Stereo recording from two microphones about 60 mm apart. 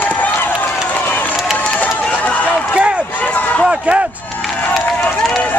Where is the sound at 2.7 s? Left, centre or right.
Centre.